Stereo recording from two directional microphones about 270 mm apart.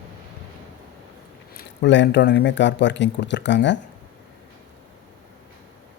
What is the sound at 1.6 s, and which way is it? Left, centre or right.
Speech, left.